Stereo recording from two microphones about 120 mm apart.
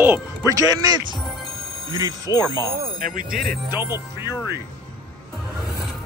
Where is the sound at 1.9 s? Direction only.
30° right (ahead or behind).